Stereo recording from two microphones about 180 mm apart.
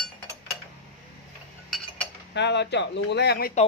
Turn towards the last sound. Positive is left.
turn(degrees=65)  # may be behind; listen again after turning